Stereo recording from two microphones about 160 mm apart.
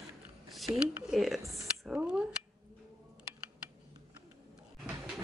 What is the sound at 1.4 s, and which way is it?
Speech, 20° right (ahead or behind).